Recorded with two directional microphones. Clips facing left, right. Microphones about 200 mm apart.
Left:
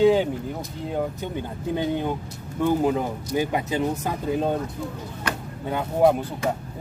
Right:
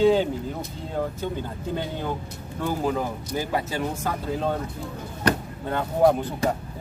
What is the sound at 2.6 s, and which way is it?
Speech, 20° left (ahead or behind).